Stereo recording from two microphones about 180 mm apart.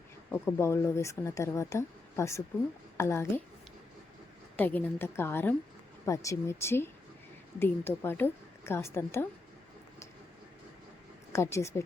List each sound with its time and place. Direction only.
0.3 s speech: 15° left (ahead or behind)
4.5 s speech: 10° left (ahead or behind)
11.3 s speech: 15° left (ahead or behind)